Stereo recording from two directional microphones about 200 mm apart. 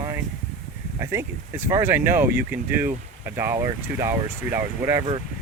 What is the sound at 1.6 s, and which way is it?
Speech, 10° right (ahead or behind).